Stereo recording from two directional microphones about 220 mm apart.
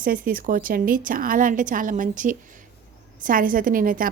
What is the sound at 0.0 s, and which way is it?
A woman's voice, 40° right (ahead or behind).